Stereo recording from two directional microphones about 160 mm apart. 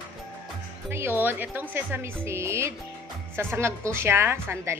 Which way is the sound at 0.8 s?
15° right (ahead or behind).